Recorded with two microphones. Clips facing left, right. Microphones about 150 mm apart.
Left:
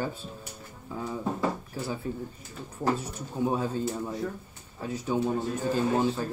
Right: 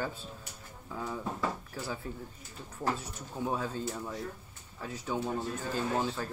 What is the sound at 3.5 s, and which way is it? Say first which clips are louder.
Speech: left 4 dB; 20° left (ahead or behind).